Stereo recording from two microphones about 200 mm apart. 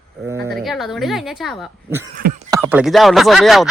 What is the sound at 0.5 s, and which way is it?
Speech, centre (ahead or behind).